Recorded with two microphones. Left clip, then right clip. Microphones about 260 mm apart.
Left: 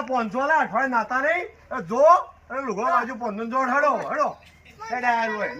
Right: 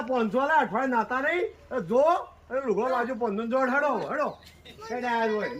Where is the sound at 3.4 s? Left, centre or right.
Centre.